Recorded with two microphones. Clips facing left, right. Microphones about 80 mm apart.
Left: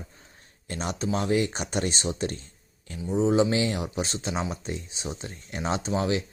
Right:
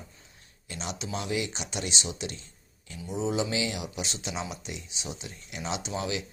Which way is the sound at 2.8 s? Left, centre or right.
Left.